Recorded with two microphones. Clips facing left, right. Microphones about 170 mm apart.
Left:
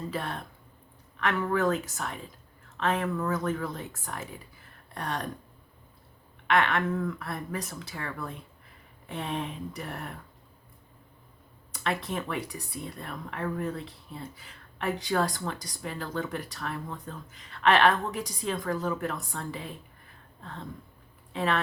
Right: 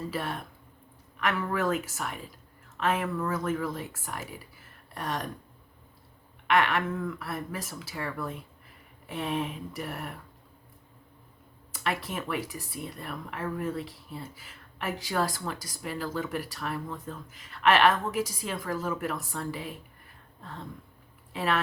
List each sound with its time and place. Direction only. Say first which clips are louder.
0.1 s speech: right 1 dB; 5° right (ahead or behind)
6.5 s speech: even; 5° right (ahead or behind)
11.7 s speech: left 1 dB; 5° right (ahead or behind)
21.3 s speech: even; 5° right (ahead or behind)